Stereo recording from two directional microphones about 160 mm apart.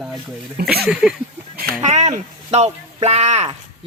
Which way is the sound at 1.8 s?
45° right (ahead or behind).